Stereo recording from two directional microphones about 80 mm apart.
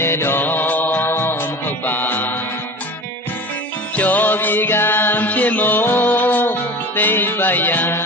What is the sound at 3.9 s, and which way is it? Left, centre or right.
Music, left.